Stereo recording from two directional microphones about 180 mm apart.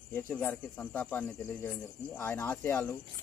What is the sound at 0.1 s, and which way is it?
Speech, 10° left (ahead or behind).